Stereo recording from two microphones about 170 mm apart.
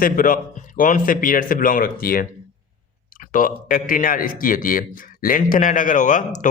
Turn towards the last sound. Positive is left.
turn(degrees=50)  # may be behind; listen again after turning